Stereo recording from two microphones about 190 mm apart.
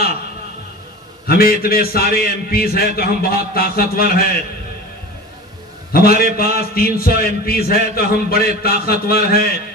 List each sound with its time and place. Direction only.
1.2 s a man's voice: 50° left (ahead or behind)
5.9 s a man's voice: 50° left (ahead or behind)